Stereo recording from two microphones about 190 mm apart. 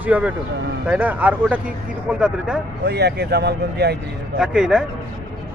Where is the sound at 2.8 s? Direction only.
60° right (ahead or behind).